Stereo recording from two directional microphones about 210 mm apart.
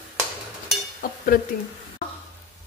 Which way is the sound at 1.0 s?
40° left (ahead or behind).